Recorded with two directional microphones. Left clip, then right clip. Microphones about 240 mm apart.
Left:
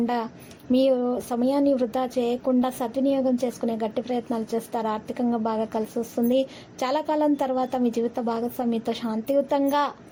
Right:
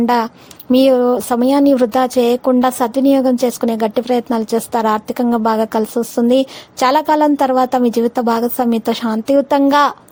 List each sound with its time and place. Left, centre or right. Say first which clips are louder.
0.0 s speech: right 12 dB; right